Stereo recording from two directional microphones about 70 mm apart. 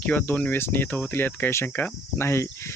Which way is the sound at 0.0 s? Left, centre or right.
Left.